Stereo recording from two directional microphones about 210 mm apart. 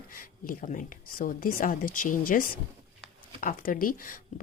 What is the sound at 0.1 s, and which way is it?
Speech, 40° left (ahead or behind).